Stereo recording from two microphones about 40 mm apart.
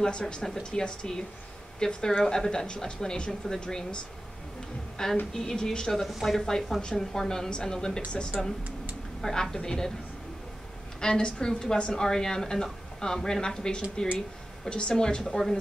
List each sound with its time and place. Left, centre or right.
0.0 s a woman's voice: left
8.3 s speech: centre
9.2 s a woman's voice: centre
11.0 s a woman's voice: left